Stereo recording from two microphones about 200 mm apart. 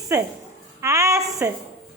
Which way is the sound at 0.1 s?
15° right (ahead or behind).